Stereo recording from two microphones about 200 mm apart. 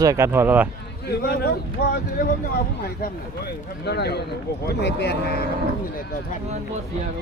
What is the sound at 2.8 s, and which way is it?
Speech, 50° left (ahead or behind).